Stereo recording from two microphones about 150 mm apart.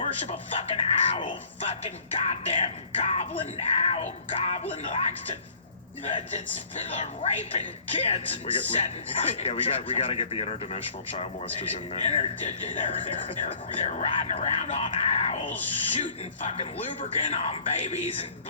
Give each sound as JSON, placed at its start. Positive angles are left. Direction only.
{"t": 0.0, "sound": "speech", "side_deg": 45}
{"t": 6.9, "sound": "speech", "side_deg": 45}
{"t": 17.0, "sound": "speech", "side_deg": 50}